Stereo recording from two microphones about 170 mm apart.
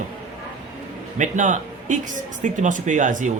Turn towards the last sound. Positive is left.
turn(degrees=-50)  # may be behind; listen again after turning